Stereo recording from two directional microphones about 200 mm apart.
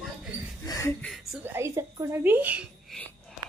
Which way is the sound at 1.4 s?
15° right (ahead or behind).